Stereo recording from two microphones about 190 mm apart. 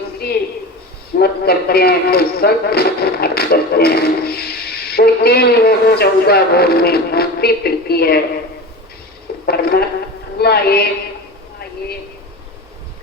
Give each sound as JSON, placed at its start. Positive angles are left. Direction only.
{"t": 1.2, "sound": "a man's voice", "side_deg": 55}
{"t": 9.5, "sound": "a man's voice", "side_deg": 55}